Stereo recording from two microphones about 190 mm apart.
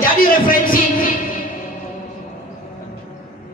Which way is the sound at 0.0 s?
50° left (ahead or behind).